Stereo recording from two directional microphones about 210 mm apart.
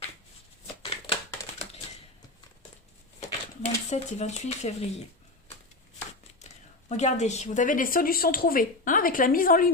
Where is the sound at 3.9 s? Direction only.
30° left (ahead or behind).